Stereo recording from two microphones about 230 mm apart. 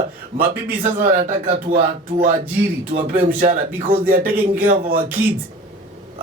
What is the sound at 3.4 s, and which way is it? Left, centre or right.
Speech, right.